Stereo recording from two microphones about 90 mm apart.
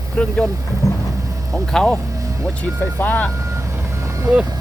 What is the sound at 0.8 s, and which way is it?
Vehicle, 40° left (ahead or behind).